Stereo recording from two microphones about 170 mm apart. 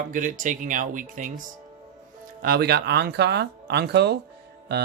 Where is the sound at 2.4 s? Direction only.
65° right (ahead or behind).